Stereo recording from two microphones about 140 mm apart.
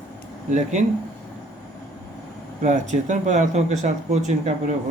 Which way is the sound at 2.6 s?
60° right (ahead or behind).